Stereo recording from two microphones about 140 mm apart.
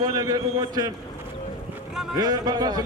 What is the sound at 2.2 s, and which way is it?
Speech, 30° right (ahead or behind).